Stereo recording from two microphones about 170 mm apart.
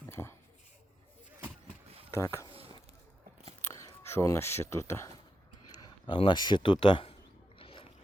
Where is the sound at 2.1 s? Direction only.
15° left (ahead or behind).